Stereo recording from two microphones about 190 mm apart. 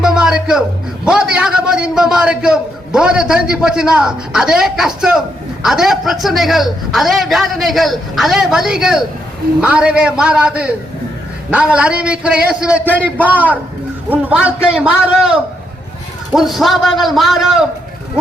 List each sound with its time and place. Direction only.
0.0 s music: 5° right (ahead or behind)
1.0 s a man's voice: 5° right (ahead or behind)